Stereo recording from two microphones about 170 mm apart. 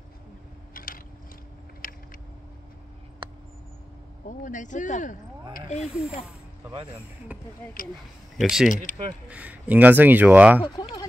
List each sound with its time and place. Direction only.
0.7 s a sound: 55° left (ahead or behind)
4.3 s speech: 50° left (ahead or behind)
5.8 s speech: 5° right (ahead or behind)
7.3 s speech: 10° right (ahead or behind)
10.6 s speech: 25° left (ahead or behind)